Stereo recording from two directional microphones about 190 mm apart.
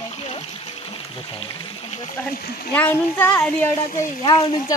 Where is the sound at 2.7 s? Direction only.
10° left (ahead or behind).